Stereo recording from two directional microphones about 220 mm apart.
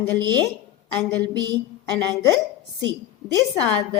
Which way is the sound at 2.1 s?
15° left (ahead or behind).